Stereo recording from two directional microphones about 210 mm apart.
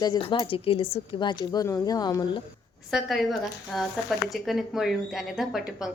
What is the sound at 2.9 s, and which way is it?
Speech, centre (ahead or behind).